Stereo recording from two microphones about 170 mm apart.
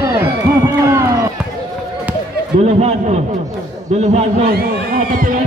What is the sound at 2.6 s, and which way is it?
A man's voice, 40° right (ahead or behind).